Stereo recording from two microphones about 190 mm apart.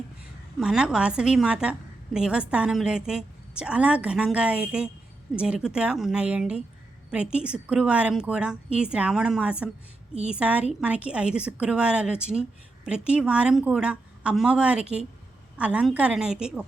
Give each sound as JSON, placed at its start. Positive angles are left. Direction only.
{"t": 0.6, "sound": "a woman's voice", "side_deg": -5}